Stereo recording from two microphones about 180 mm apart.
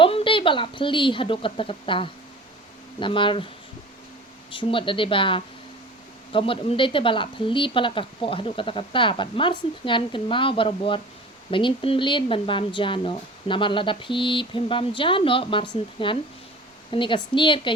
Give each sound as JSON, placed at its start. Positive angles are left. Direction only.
{"t": 0.0, "sound": "a woman's voice", "side_deg": 30}
{"t": 4.5, "sound": "a woman's voice", "side_deg": 30}